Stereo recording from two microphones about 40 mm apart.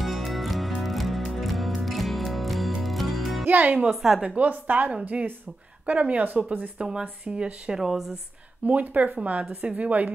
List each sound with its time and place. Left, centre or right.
0.0 s music: centre
3.4 s speech: right
3.9 s speech: centre
4.4 s speech: right
6.8 s speech: right
7.7 s speech: centre
8.6 s speech: right